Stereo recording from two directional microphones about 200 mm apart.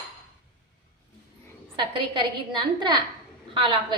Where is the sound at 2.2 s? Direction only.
20° right (ahead or behind).